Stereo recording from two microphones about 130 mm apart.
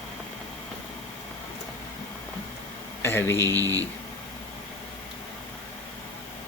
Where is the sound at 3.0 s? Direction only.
20° left (ahead or behind).